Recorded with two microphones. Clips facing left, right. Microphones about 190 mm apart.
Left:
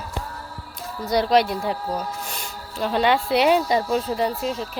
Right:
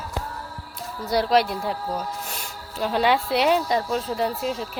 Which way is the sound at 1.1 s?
5° right (ahead or behind).